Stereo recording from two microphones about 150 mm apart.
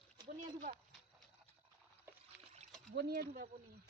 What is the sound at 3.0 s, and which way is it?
Speech, 90° right.